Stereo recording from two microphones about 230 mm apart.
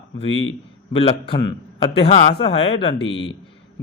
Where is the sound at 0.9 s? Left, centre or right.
Left.